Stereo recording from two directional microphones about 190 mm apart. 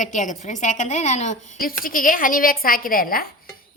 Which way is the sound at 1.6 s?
50° left (ahead or behind).